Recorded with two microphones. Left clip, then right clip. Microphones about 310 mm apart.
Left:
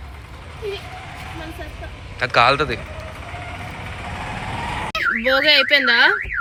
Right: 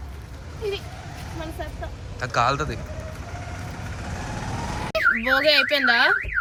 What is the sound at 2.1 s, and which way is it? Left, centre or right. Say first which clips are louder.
Speech: left 7 dB; centre.